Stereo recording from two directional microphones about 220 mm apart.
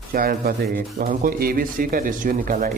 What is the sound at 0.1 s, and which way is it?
Speech, 40° right (ahead or behind).